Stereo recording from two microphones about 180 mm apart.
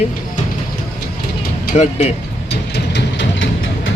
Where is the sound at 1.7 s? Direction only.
40° left (ahead or behind).